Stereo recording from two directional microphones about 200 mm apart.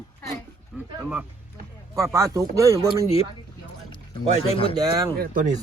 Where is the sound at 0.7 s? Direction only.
Centre (ahead or behind).